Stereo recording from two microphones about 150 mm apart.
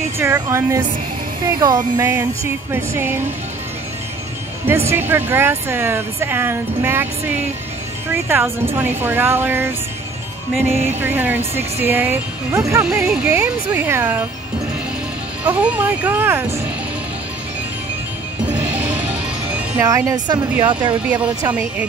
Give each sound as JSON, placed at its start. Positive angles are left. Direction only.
{"t": 0.2, "sound": "speech", "side_deg": -20}
{"t": 4.6, "sound": "speech", "side_deg": -15}
{"t": 12.8, "sound": "speech", "side_deg": -10}
{"t": 15.4, "sound": "speech", "side_deg": -10}
{"t": 18.4, "sound": "music", "side_deg": -10}
{"t": 19.8, "sound": "speech", "side_deg": -20}
{"t": 20.9, "sound": "speech", "side_deg": -10}